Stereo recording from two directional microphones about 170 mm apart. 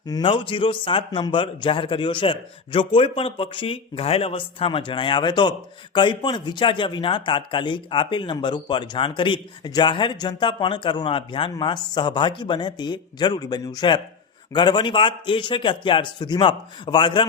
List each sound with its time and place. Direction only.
0.1 s a man's voice: 30° left (ahead or behind)